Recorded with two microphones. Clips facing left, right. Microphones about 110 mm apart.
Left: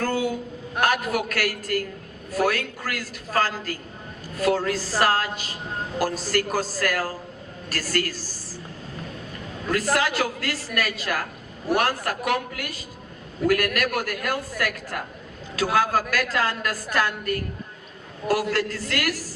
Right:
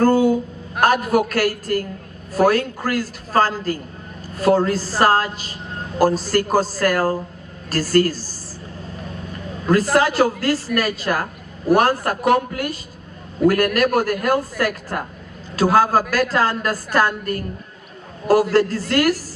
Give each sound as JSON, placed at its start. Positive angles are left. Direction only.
{"t": 0.0, "sound": "a woman's voice", "side_deg": -35}
{"t": 9.6, "sound": "a woman's voice", "side_deg": -35}
{"t": 18.5, "sound": "a woman's voice", "side_deg": -35}